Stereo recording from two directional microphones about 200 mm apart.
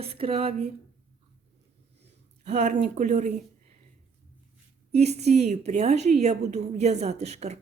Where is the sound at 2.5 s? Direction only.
35° right (ahead or behind).